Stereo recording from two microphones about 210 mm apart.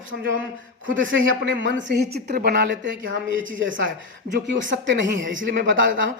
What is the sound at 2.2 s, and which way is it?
Speech, 50° right (ahead or behind).